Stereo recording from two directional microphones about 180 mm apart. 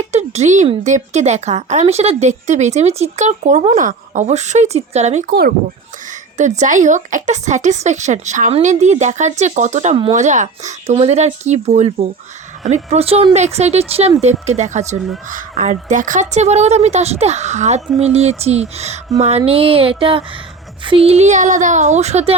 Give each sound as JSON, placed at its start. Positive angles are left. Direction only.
{"t": 0.0, "sound": "speech", "side_deg": -40}
{"t": 5.3, "sound": "speech", "side_deg": -55}
{"t": 6.3, "sound": "speech", "side_deg": -40}